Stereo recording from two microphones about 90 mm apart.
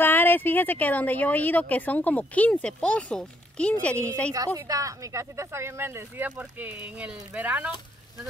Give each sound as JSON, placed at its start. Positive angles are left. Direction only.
{"t": 0.0, "sound": "speech", "side_deg": 20}
{"t": 4.6, "sound": "speech", "side_deg": -40}
{"t": 6.2, "sound": "speech", "side_deg": -15}